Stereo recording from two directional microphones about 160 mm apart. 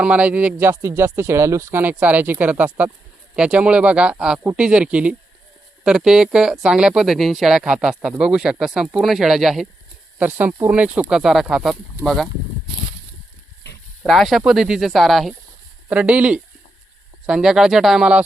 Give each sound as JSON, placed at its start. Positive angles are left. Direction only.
{"t": 0.0, "sound": "speech", "side_deg": -10}
{"t": 13.7, "sound": "a sound", "side_deg": 90}
{"t": 14.0, "sound": "speech", "side_deg": 0}